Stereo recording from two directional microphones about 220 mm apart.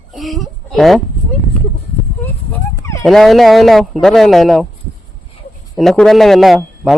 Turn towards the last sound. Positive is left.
turn(degrees=0)  # may be behind; listen again after turning